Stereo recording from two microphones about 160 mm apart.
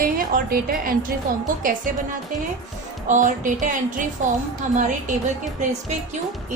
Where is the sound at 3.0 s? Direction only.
55° right (ahead or behind).